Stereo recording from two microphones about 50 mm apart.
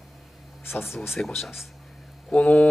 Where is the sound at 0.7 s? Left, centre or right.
Left.